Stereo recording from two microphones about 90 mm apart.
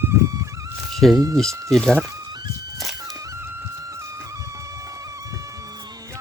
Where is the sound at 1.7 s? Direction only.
5° left (ahead or behind).